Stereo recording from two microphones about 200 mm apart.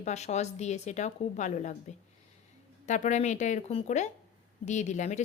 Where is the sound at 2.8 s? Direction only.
35° left (ahead or behind).